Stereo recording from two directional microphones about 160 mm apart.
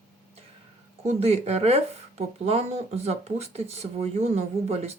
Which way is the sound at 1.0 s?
40° right (ahead or behind).